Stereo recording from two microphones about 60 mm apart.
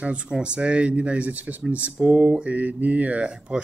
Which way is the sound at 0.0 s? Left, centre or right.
Centre.